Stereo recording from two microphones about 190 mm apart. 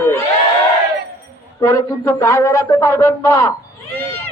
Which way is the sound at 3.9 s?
15° left (ahead or behind).